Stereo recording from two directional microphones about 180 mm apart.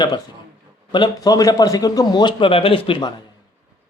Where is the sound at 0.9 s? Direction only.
20° left (ahead or behind).